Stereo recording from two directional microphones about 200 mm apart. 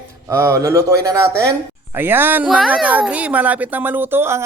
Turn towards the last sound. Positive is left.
turn(degrees=-10)  # may be behind; listen again after turning